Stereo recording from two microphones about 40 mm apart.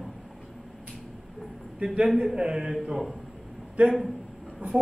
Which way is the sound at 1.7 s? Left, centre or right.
Right.